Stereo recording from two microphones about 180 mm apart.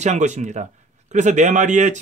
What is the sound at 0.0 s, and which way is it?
Speech, 40° right (ahead or behind).